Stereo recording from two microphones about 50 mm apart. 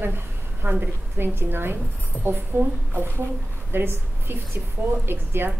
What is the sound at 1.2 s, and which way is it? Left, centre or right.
A woman's voice, right.